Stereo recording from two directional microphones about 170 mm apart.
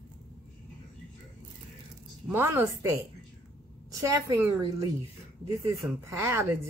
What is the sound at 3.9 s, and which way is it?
Speech, 20° right (ahead or behind).